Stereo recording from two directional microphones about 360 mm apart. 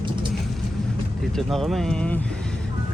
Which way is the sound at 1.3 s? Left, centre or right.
Centre.